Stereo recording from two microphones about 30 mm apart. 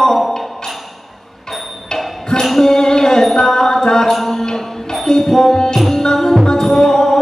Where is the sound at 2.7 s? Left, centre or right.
Centre.